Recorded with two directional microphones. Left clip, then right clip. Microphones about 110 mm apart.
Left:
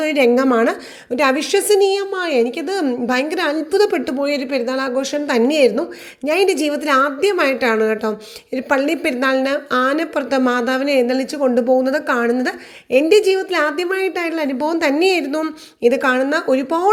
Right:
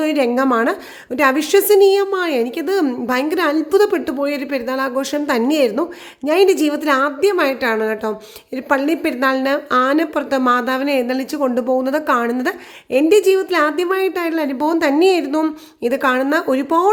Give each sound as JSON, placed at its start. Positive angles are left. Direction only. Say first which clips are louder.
{"t": 0.0, "sound": "a woman's voice", "louder": "left 2 dB", "side_deg": -15}
{"t": 16.2, "sound": "speech", "louder": "even", "side_deg": -35}